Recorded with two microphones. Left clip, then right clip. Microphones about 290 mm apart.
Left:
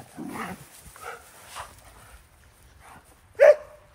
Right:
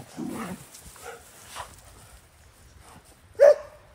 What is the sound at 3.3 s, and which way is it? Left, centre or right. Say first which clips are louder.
Dog: left 1 dB; left.